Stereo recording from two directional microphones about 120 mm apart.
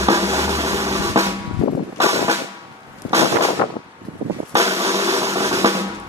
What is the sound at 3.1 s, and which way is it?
Vehicle, 25° right (ahead or behind).